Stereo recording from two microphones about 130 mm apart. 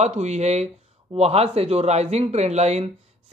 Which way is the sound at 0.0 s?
60° right (ahead or behind).